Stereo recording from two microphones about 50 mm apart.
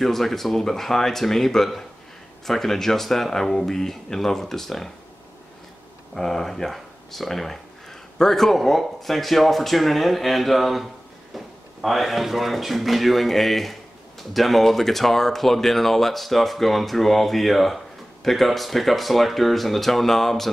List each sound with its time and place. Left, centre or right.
0.0 s speech: centre
6.1 s speech: centre